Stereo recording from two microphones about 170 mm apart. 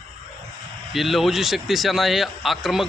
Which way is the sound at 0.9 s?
Centre (ahead or behind).